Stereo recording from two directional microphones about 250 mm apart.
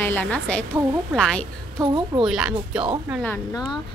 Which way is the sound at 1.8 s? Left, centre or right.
Centre.